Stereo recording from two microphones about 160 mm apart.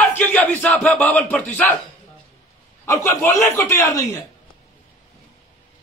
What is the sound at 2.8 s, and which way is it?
A man's voice, 15° left (ahead or behind).